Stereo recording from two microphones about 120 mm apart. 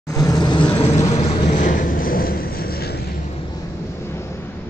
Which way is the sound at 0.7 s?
60° left (ahead or behind).